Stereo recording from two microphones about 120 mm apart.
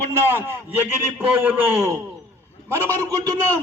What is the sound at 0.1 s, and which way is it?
A man's voice, 20° right (ahead or behind).